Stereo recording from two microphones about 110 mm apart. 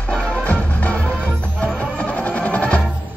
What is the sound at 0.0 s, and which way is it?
Music, 10° left (ahead or behind).